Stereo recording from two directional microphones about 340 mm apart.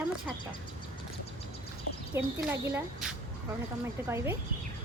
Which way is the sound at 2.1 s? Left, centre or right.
Centre.